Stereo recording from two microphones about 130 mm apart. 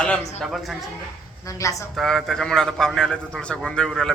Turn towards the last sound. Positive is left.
turn(degrees=5)  # may be behind; listen again after turning